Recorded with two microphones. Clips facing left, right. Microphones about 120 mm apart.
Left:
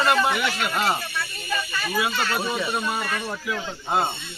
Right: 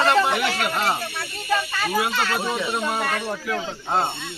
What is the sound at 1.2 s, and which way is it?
Snake, 70° right (ahead or behind).